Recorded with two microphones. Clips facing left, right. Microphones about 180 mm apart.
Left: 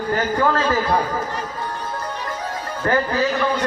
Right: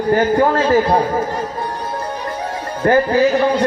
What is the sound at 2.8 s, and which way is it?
Speech, 35° right (ahead or behind).